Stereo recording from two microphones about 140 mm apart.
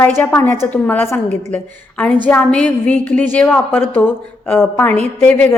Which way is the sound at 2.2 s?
10° left (ahead or behind).